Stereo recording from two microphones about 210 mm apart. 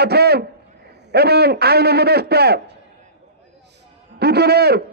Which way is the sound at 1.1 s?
50° right (ahead or behind).